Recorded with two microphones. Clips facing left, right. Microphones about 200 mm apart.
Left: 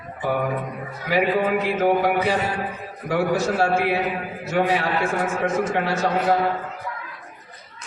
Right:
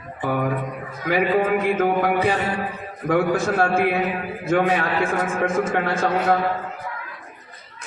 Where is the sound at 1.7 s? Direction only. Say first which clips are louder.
Even; 50° right (ahead or behind).